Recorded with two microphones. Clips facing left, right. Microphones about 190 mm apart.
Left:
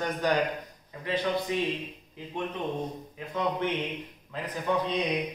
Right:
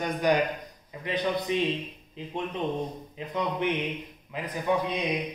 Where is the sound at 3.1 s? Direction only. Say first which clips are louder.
Left 1 dB; 20° right (ahead or behind).